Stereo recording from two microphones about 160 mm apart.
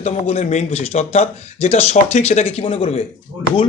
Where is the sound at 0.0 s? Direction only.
45° left (ahead or behind).